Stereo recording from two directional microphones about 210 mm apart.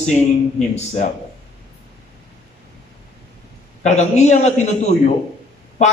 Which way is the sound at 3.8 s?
35° left (ahead or behind).